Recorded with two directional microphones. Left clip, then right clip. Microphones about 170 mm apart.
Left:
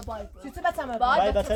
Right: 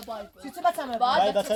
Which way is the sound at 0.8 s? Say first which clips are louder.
Left 1 dB; 15° left (ahead or behind).